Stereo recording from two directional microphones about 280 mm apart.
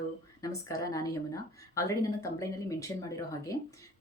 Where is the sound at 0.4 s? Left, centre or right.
Centre.